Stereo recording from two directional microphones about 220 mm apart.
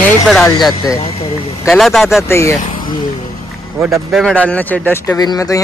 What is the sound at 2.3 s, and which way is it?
Speech, 10° left (ahead or behind).